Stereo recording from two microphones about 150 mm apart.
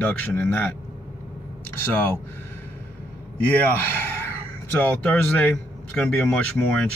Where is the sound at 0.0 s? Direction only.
10° left (ahead or behind).